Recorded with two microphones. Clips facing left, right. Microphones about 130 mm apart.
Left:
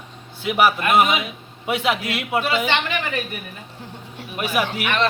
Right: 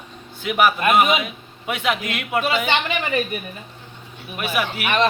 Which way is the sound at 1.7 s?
30° left (ahead or behind).